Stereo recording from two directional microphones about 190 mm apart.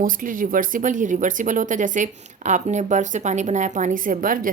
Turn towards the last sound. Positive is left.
turn(degrees=-45)  # may be behind; listen again after turning